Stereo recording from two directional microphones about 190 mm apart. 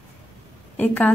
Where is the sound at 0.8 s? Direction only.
10° left (ahead or behind).